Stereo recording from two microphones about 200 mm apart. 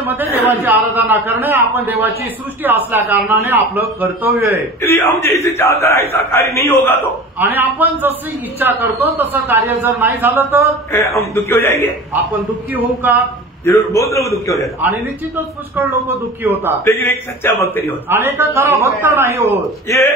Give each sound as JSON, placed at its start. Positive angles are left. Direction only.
{"t": 0.0, "sound": "a man's voice", "side_deg": -10}
{"t": 4.8, "sound": "a man's voice", "side_deg": 10}
{"t": 7.3, "sound": "a man's voice", "side_deg": -10}
{"t": 10.9, "sound": "a man's voice", "side_deg": 15}
{"t": 12.7, "sound": "a man's voice", "side_deg": -10}
{"t": 13.7, "sound": "a man's voice", "side_deg": 15}
{"t": 14.8, "sound": "a man's voice", "side_deg": -10}
{"t": 16.8, "sound": "a man's voice", "side_deg": 15}
{"t": 18.1, "sound": "a man's voice", "side_deg": -10}